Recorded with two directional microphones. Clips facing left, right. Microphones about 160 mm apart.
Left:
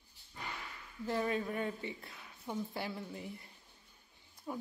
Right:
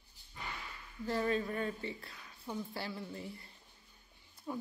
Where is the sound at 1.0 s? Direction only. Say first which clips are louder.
Right 1 dB; 15° left (ahead or behind).